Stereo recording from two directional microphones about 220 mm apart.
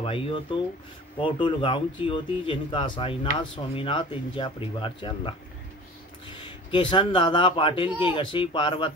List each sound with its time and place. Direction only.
0.0 s speech: 25° left (ahead or behind)